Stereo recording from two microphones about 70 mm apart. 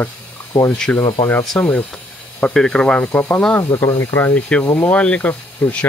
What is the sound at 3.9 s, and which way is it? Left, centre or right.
Speech, left.